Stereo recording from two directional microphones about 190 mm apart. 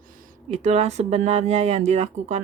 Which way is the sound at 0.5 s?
35° right (ahead or behind).